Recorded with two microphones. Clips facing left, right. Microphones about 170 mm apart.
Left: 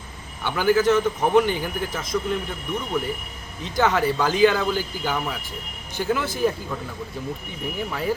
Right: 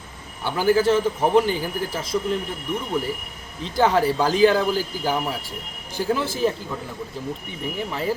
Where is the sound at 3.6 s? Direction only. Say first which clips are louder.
Right 2 dB; 30° right (ahead or behind).